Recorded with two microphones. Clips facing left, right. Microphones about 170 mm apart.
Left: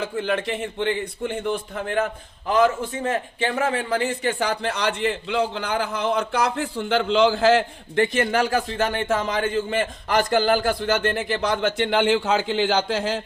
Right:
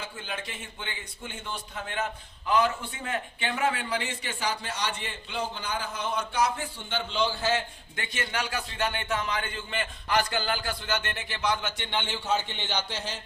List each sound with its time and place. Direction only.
0.0 s a man's voice: 65° left (ahead or behind)
2.5 s a man's voice: 45° left (ahead or behind); by 7.6 s 90° left
7.9 s a man's voice: 55° left (ahead or behind)
11.9 s a man's voice: 90° left